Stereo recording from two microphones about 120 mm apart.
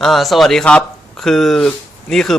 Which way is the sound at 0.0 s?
Centre (ahead or behind).